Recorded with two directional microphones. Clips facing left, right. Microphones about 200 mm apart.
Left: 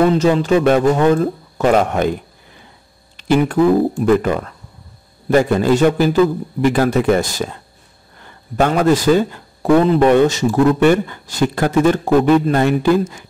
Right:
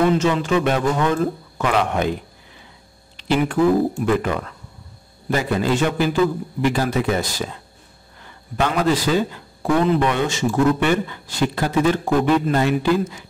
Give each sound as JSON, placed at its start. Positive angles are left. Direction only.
{"t": 0.0, "sound": "speech", "side_deg": 35}
{"t": 3.2, "sound": "speech", "side_deg": 50}
{"t": 8.5, "sound": "a man's voice", "side_deg": 50}